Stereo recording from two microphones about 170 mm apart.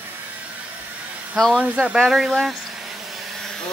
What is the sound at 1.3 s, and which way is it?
Insect, 5° right (ahead or behind).